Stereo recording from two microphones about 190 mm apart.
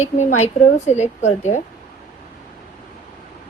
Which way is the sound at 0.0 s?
40° left (ahead or behind).